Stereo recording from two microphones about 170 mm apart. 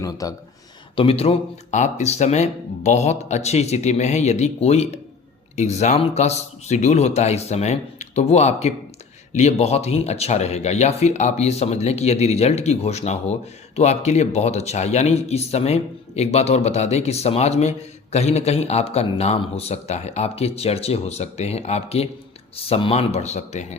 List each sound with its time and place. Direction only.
0.0 s speech: 20° left (ahead or behind)
0.9 s speech: 35° left (ahead or behind)